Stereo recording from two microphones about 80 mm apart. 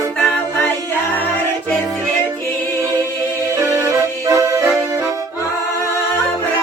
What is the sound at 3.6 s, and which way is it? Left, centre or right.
Music, right.